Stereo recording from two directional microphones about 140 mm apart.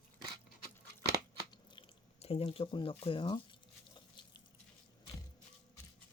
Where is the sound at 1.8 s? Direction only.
40° left (ahead or behind).